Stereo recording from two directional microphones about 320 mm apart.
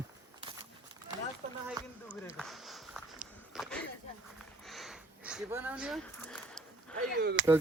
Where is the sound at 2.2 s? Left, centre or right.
Centre.